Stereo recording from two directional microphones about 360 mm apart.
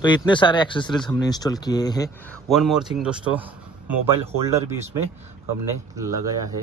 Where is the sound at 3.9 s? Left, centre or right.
Right.